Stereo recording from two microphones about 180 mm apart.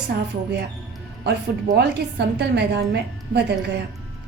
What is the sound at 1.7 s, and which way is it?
A woman's voice, 70° right (ahead or behind).